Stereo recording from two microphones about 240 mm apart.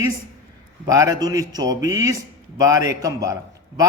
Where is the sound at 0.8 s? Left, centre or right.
Centre.